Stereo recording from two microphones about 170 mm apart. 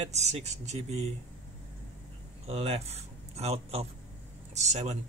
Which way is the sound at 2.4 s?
35° right (ahead or behind).